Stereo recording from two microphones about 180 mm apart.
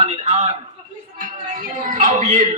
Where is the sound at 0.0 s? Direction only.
35° right (ahead or behind).